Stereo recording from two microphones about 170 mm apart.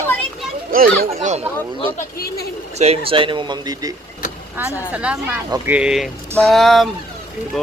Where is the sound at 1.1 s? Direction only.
40° right (ahead or behind).